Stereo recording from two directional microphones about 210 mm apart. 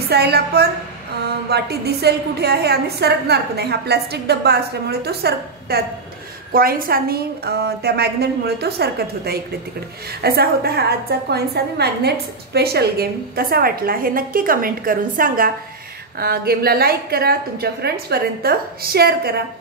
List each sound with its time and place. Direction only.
0.1 s a woman's voice: 50° right (ahead or behind)